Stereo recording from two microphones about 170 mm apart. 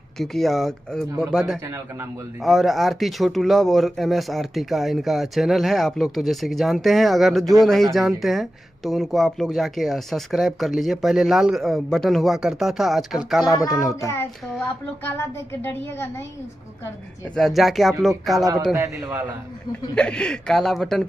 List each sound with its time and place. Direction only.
0.2 s speech: centre (ahead or behind)
1.6 s a man's voice: 15° right (ahead or behind)
2.4 s speech: centre (ahead or behind)
15.0 s speech: 15° left (ahead or behind)
17.4 s speech: centre (ahead or behind)
18.4 s a man's voice: 20° right (ahead or behind)
20.0 s speech: 5° left (ahead or behind)